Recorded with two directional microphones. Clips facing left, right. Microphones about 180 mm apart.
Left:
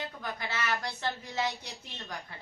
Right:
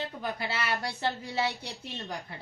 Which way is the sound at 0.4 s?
30° right (ahead or behind).